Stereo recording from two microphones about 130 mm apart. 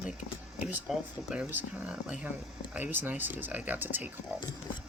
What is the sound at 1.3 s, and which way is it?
Speech, 10° right (ahead or behind).